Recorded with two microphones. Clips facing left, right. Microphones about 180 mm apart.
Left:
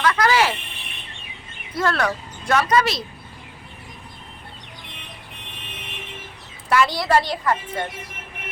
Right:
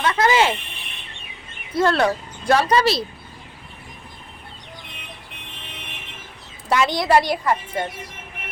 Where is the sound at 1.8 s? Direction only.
25° right (ahead or behind).